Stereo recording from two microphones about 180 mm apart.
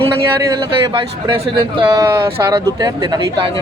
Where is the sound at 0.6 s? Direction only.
25° right (ahead or behind).